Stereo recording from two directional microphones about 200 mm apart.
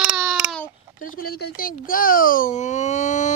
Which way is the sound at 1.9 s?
45° left (ahead or behind).